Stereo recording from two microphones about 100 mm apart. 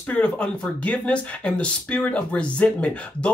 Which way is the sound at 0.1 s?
15° left (ahead or behind).